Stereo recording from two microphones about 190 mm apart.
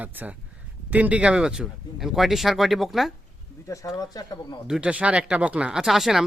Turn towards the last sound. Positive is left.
turn(degrees=0)  # may be behind; listen again after turning